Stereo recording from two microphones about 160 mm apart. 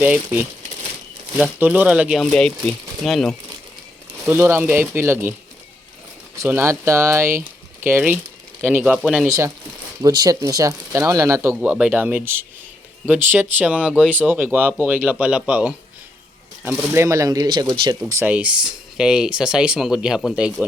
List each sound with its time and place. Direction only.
0.0 s speech: 10° right (ahead or behind)
4.3 s speech: 15° right (ahead or behind)
6.3 s speech: 15° right (ahead or behind); by 9.3 s centre (ahead or behind)
10.0 s speech: 25° right (ahead or behind)
18.1 s speech: 10° right (ahead or behind)